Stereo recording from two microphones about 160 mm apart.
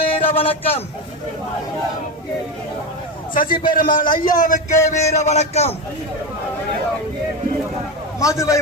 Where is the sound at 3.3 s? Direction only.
65° left (ahead or behind); by 5.7 s 40° left (ahead or behind).